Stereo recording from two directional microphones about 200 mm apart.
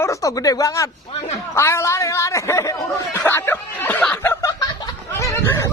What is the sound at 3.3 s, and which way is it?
Snicker, 10° left (ahead or behind).